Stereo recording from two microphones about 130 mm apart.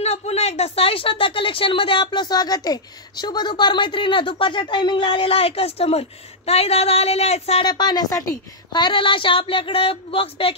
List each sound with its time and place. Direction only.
0.0 s speech: 55° left (ahead or behind)
7.6 s a woman's voice: 35° left (ahead or behind)